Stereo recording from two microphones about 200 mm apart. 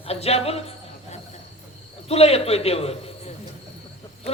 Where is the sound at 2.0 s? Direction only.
30° left (ahead or behind).